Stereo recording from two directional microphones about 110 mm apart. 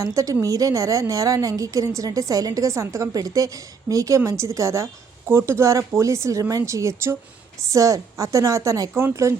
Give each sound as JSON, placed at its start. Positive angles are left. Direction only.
{"t": 0.0, "sound": "a woman's voice", "side_deg": -30}